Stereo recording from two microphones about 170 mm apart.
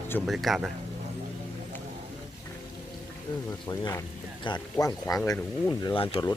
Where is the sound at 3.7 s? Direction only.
25° left (ahead or behind).